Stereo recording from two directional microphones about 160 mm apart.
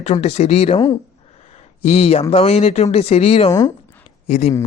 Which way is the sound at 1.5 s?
40° left (ahead or behind).